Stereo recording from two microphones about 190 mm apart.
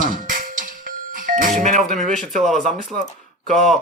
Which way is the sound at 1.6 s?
40° right (ahead or behind).